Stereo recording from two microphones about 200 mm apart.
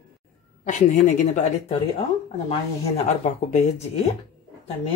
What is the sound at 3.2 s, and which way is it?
Speech, 35° left (ahead or behind).